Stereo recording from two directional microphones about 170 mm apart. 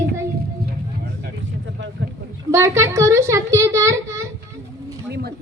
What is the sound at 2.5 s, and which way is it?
A child's voice, 15° right (ahead or behind).